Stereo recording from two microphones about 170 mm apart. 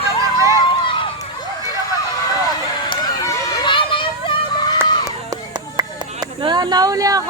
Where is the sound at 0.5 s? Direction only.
30° left (ahead or behind).